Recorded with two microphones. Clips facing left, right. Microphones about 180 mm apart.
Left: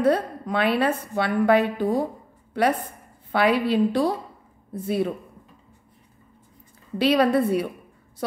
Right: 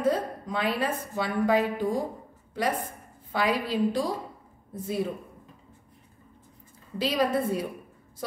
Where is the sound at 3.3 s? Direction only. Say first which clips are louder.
Left 6 dB; 65° left (ahead or behind).